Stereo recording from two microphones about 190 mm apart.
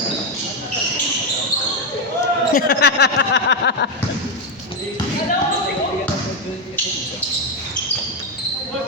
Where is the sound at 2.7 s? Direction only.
60° left (ahead or behind).